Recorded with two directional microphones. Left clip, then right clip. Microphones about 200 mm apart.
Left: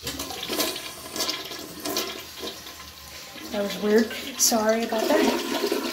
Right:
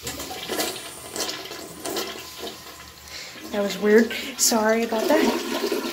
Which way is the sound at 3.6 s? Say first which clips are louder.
Right 4 dB; 5° right (ahead or behind).